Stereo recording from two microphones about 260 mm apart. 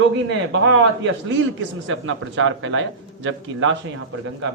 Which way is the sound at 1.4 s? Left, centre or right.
Right.